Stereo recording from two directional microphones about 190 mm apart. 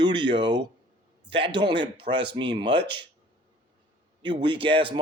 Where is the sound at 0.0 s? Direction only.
25° right (ahead or behind).